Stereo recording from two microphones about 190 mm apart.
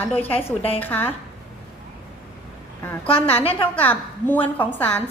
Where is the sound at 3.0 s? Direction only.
30° left (ahead or behind).